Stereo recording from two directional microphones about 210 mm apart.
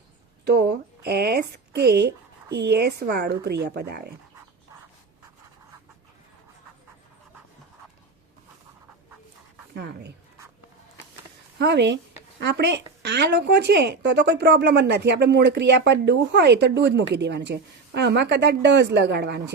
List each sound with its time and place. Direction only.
0.4 s a sound: 50° right (ahead or behind)
9.7 s speech: 50° right (ahead or behind)
11.6 s speech: 55° right (ahead or behind)